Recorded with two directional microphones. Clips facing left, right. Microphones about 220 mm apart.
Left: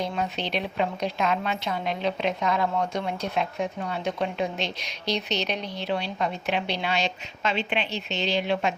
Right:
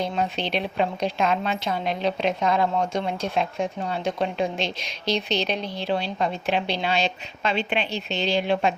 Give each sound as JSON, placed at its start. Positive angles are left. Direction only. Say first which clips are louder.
{"t": 0.0, "sound": "a woman's voice", "louder": "right 3 dB", "side_deg": -30}